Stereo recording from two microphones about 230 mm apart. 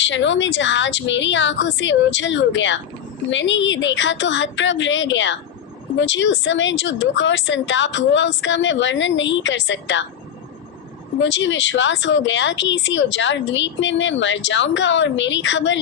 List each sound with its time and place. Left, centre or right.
0.0 s speech: left
11.2 s speech: left